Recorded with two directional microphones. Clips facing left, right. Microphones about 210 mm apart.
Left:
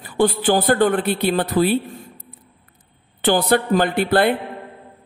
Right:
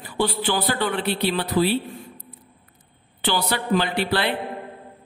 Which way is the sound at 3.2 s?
50° left (ahead or behind).